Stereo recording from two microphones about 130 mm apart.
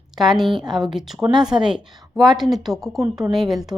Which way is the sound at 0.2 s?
Centre (ahead or behind).